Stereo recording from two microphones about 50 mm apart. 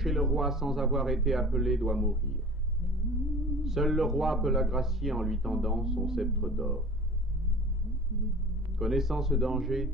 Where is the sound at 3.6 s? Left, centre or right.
Centre.